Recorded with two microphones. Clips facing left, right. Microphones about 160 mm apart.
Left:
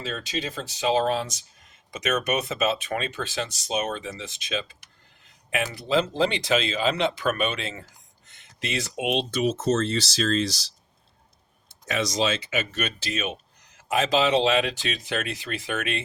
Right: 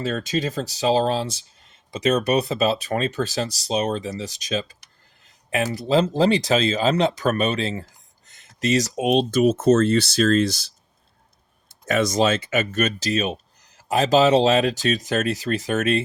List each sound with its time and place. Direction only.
0.0 s speech: 45° right (ahead or behind)
11.9 s speech: 50° right (ahead or behind)